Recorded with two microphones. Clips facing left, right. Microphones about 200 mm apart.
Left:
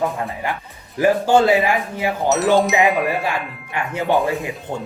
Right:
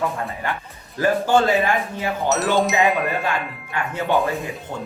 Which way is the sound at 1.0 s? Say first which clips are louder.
Left 3 dB; 15° left (ahead or behind).